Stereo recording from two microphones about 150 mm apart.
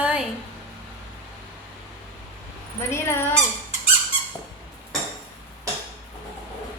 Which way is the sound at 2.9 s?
15° left (ahead or behind).